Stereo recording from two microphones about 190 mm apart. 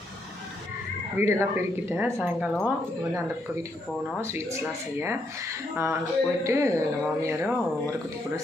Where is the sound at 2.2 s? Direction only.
5° left (ahead or behind).